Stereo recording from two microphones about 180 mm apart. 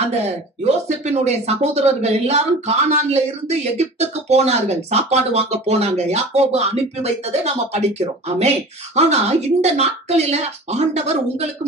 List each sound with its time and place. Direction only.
0.1 s speech: 40° right (ahead or behind)